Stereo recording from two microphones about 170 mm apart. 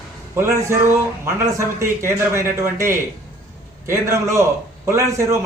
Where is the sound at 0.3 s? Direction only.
15° right (ahead or behind).